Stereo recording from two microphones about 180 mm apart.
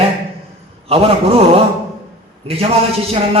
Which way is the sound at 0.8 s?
30° right (ahead or behind).